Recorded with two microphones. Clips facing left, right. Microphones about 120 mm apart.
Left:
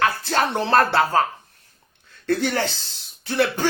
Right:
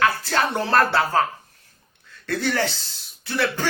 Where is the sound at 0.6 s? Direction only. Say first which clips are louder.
Left 2 dB; 25° left (ahead or behind).